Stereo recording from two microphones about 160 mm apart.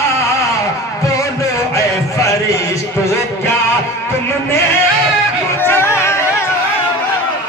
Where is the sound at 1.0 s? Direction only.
20° left (ahead or behind).